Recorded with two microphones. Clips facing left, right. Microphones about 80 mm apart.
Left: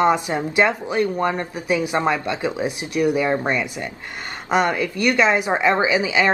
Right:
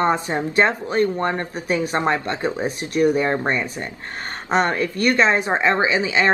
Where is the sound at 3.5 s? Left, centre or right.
Right.